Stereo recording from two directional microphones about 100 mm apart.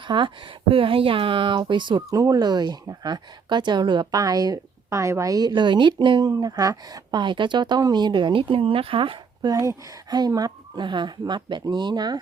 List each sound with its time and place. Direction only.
0.1 s speech: 50° right (ahead or behind)
0.7 s speech: 65° right (ahead or behind)
2.0 s a woman's voice: 40° right (ahead or behind)
6.3 s speech: 35° right (ahead or behind); by 9.5 s 60° right (ahead or behind)
9.5 s speech: 35° right (ahead or behind)